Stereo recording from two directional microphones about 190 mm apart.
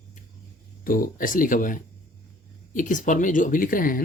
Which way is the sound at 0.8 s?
50° left (ahead or behind).